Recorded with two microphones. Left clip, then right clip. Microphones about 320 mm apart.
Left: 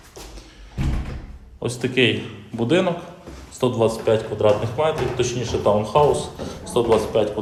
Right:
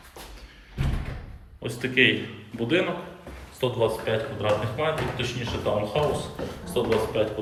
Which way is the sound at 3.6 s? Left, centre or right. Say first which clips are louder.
Left 5 dB; centre.